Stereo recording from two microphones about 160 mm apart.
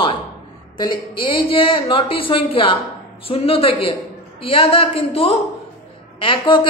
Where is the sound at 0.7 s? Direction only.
30° left (ahead or behind).